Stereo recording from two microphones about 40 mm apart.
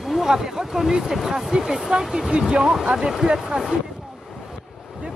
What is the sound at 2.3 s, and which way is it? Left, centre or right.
Speech, right.